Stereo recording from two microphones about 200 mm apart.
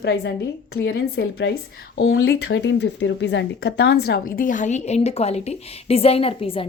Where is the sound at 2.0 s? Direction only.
80° left.